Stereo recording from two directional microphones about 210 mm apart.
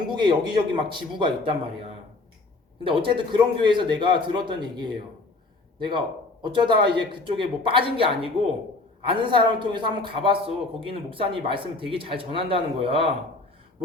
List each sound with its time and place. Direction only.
0.1 s speech: 20° right (ahead or behind)
2.8 s speech: 25° right (ahead or behind)
6.4 s speech: 20° right (ahead or behind)